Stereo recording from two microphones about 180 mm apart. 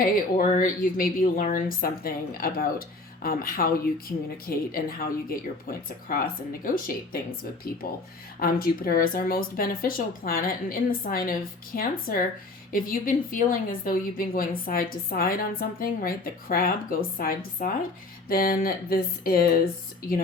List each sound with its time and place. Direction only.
0.0 s a woman's voice: 45° left (ahead or behind)